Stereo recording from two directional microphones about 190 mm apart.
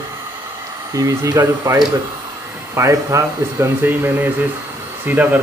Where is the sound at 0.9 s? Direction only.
20° right (ahead or behind).